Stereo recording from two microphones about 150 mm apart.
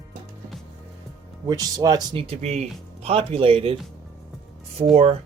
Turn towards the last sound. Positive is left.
turn(degrees=-40)  # may be behind; listen again after turning